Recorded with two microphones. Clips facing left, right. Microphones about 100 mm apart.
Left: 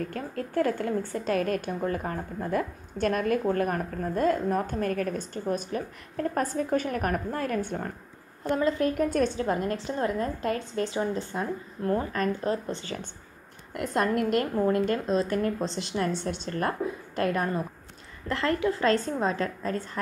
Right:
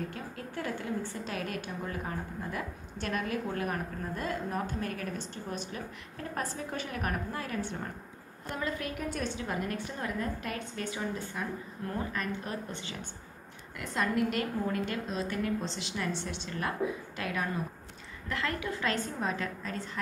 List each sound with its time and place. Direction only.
0.1 s a woman's voice: 50° left (ahead or behind)
8.5 s a woman's voice: 30° left (ahead or behind)
8.9 s a woman's voice: 45° left (ahead or behind); by 11.4 s 30° left (ahead or behind)
11.9 s a woman's voice: 40° left (ahead or behind)
13.7 s a woman's voice: 50° left (ahead or behind)
18.3 s a woman's voice: 35° left (ahead or behind)